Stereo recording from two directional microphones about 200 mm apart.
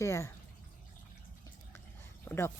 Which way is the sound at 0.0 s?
15° left (ahead or behind).